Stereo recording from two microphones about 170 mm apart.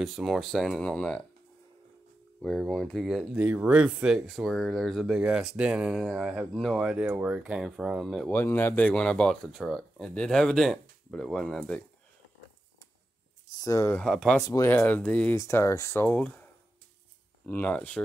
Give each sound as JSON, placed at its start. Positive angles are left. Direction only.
{"t": 0.0, "sound": "speech", "side_deg": 0}
{"t": 2.4, "sound": "speech", "side_deg": 5}
{"t": 8.3, "sound": "speech", "side_deg": 15}
{"t": 13.6, "sound": "speech", "side_deg": 20}
{"t": 14.0, "sound": "speech", "side_deg": 0}
{"t": 14.4, "sound": "speech", "side_deg": 15}
{"t": 17.5, "sound": "speech", "side_deg": 10}